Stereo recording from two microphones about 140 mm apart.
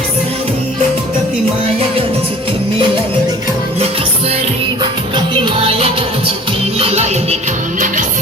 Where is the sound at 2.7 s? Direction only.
35° right (ahead or behind).